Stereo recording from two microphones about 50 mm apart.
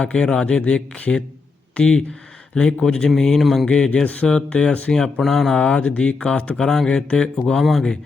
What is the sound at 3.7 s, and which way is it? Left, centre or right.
Speech, centre.